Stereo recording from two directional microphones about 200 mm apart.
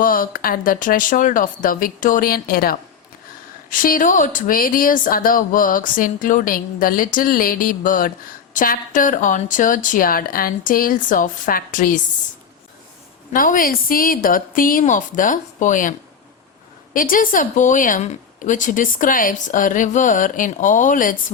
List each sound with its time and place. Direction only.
0.0 s a woman's voice: 45° left (ahead or behind)
13.3 s a woman's voice: 45° left (ahead or behind)